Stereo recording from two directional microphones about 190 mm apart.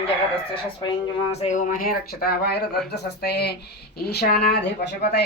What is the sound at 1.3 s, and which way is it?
A woman's voice, 35° left (ahead or behind).